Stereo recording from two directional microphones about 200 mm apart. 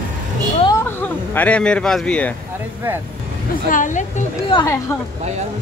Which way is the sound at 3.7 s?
40° left (ahead or behind).